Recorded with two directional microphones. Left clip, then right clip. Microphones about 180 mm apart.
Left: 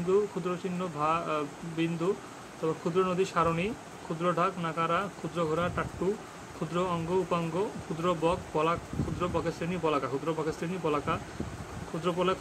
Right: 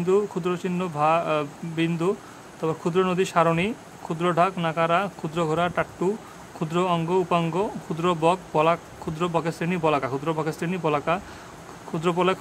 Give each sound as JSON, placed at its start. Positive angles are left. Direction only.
{"t": 0.1, "sound": "speech", "side_deg": -40}